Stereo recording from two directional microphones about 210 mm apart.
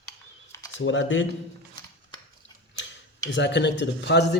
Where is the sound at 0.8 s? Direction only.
65° left (ahead or behind).